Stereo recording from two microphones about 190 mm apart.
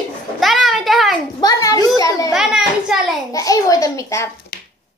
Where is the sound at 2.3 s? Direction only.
Centre (ahead or behind).